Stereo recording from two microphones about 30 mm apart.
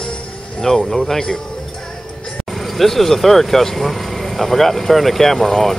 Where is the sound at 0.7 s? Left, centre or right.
Left.